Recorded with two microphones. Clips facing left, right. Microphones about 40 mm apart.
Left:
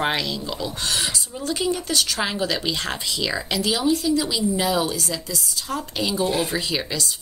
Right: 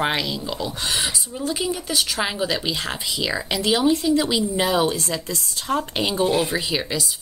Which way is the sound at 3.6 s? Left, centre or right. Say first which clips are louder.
Right 3 dB; right.